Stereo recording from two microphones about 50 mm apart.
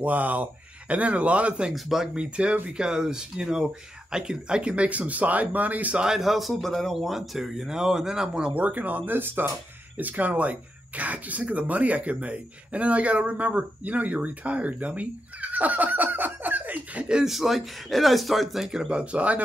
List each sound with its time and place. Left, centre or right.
0.0 s speech: right
1.7 s a man's voice: centre
2.1 s speech: right
6.1 s speech: centre; by 17.0 s right
17.0 s speech: centre
17.3 s a man's voice: centre
18.7 s speech: centre